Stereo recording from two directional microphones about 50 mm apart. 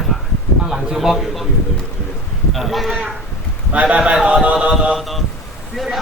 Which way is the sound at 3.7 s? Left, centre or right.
Right.